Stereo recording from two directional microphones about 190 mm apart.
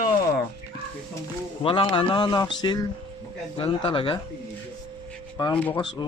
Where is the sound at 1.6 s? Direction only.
25° left (ahead or behind).